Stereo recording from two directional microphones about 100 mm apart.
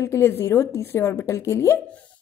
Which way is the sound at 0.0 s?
30° left (ahead or behind).